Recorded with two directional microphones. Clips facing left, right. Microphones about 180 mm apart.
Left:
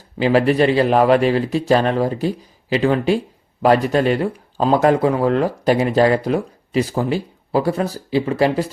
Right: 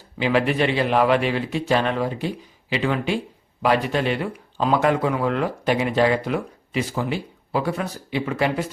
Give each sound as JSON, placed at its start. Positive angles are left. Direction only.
{"t": 0.2, "sound": "speech", "side_deg": 40}